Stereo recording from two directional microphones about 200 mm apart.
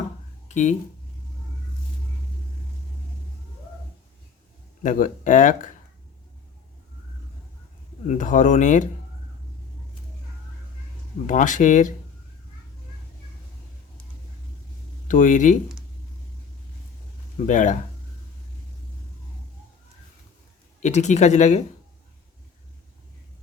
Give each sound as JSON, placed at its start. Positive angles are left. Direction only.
{"t": 0.4, "sound": "speech", "side_deg": 35}
{"t": 4.8, "sound": "speech", "side_deg": 40}
{"t": 8.0, "sound": "speech", "side_deg": 40}
{"t": 11.3, "sound": "speech", "side_deg": 40}
{"t": 15.0, "sound": "speech", "side_deg": 40}
{"t": 17.3, "sound": "speech", "side_deg": 40}
{"t": 20.8, "sound": "speech", "side_deg": 35}